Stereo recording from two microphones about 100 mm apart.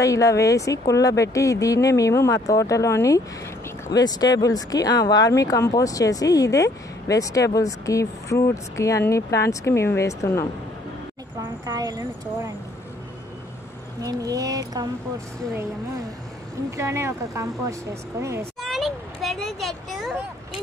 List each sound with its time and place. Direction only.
0.0 s speech: 30° left (ahead or behind)
11.3 s speech: 40° right (ahead or behind)
14.0 s a woman's voice: 35° right (ahead or behind)
16.7 s a woman's voice: 30° right (ahead or behind)
18.6 s a child's voice: centre (ahead or behind)